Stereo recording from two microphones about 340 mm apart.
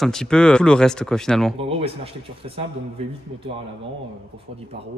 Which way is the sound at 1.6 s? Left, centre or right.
Centre.